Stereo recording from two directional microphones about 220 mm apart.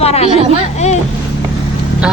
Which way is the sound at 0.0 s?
30° left (ahead or behind).